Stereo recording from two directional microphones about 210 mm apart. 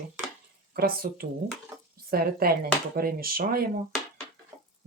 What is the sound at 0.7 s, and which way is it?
Speech, 45° right (ahead or behind).